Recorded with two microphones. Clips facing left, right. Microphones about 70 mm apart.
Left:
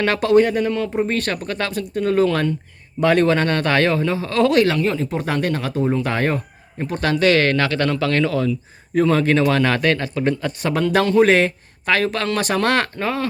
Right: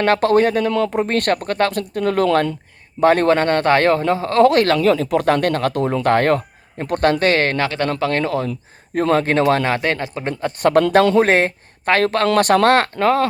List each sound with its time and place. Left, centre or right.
0.0 s speech: right
0.7 s speech: right
3.0 s speech: right
4.8 s speech: right
9.6 s speech: right
10.6 s speech: right
11.2 s speech: right
12.6 s speech: right
13.0 s speech: right